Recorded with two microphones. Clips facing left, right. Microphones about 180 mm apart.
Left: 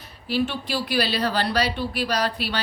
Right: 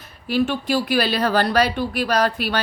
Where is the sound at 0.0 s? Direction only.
50° right (ahead or behind).